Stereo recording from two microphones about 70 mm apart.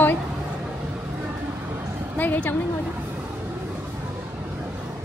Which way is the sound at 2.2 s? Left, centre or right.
Left.